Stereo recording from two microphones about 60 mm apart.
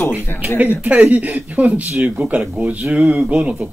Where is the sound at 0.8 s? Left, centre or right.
Right.